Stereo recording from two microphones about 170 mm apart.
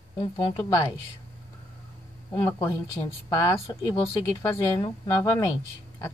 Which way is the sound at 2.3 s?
20° left (ahead or behind).